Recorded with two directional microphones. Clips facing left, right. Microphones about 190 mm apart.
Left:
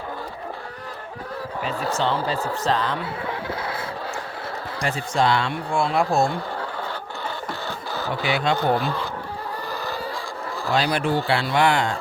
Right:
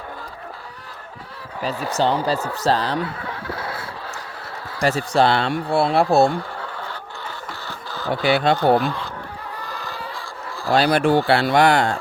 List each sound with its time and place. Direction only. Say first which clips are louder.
1.6 s speech: right 4 dB; 40° right (ahead or behind)
4.8 s speech: right 5 dB; 40° right (ahead or behind)
8.2 s speech: right 5 dB; 40° right (ahead or behind)
10.7 s speech: right 5 dB; 45° right (ahead or behind)
11.5 s speech: right 3 dB; 40° right (ahead or behind)